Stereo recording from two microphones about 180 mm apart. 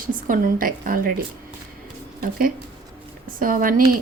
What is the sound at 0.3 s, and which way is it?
Speech, 50° right (ahead or behind).